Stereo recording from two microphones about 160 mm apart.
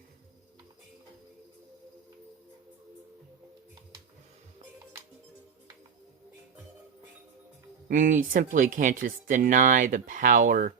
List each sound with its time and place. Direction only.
7.9 s speech: 55° right (ahead or behind)